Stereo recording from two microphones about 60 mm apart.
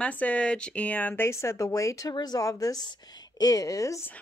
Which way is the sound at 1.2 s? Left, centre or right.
Left.